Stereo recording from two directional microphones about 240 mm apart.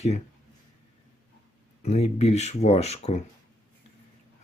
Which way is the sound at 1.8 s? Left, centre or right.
Left.